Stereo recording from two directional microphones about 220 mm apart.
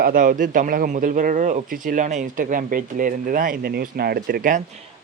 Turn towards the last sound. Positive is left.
turn(degrees=-40)  # may be behind; listen again after turning